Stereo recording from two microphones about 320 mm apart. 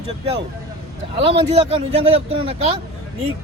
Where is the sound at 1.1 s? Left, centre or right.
Centre.